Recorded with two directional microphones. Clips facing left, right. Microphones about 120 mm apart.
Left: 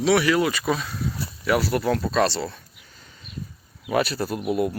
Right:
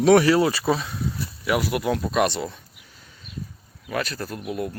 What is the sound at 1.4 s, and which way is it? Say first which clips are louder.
Speech: left 1 dB; 10° right (ahead or behind).